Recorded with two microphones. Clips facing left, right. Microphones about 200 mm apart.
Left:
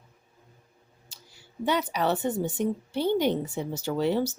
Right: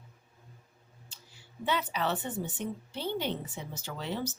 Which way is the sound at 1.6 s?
45° left (ahead or behind).